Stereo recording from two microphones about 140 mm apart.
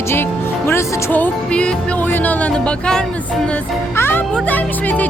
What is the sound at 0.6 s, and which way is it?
Music, 15° left (ahead or behind).